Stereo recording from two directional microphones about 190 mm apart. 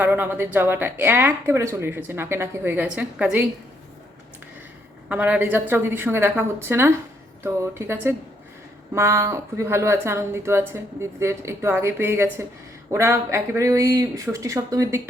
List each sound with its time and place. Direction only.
0.0 s a woman's voice: 10° right (ahead or behind)
5.0 s a woman's voice: 10° right (ahead or behind)